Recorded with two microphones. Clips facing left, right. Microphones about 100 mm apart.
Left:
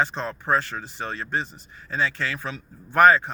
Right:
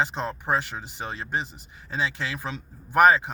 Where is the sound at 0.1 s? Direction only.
15° right (ahead or behind).